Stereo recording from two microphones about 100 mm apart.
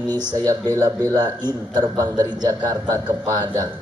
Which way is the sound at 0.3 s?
40° right (ahead or behind).